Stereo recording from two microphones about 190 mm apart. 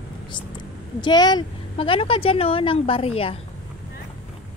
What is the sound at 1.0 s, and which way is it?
A woman's voice, 20° left (ahead or behind).